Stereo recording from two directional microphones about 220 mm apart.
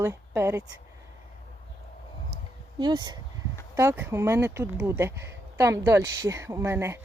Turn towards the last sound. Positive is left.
turn(degrees=-10)  # may be behind; listen again after turning